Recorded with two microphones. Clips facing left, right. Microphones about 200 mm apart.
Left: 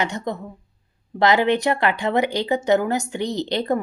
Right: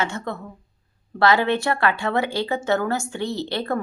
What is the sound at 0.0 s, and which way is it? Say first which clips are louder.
Speech: left 2 dB; 15° left (ahead or behind).